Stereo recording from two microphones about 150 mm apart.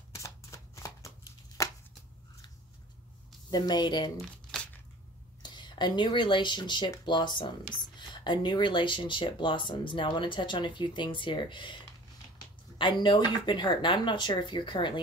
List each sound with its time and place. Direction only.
0.1 s shuffling cards: 20° left (ahead or behind)
3.4 s a woman's voice: 25° left (ahead or behind)
4.2 s crumpling: centre (ahead or behind)
5.4 s speech: 30° left (ahead or behind)